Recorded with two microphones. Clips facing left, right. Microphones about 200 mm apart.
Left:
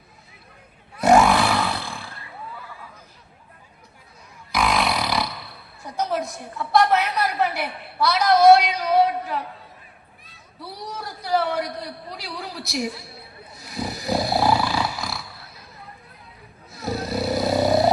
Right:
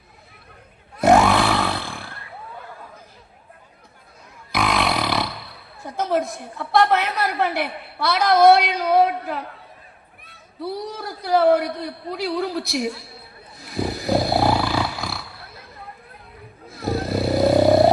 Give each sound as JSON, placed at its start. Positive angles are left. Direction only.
{"t": 0.9, "sound": "roar", "side_deg": -50}
{"t": 4.5, "sound": "burping", "side_deg": -55}
{"t": 6.0, "sound": "a woman's voice", "side_deg": -55}
{"t": 11.3, "sound": "a woman's voice", "side_deg": -55}
{"t": 13.6, "sound": "roar", "side_deg": -55}
{"t": 16.6, "sound": "snoring", "side_deg": -55}